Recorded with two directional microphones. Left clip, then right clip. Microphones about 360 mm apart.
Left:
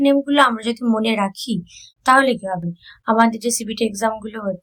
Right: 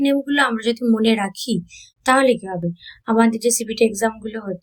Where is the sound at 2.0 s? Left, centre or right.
Left.